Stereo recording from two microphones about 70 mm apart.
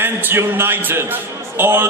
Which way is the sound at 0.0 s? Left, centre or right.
Right.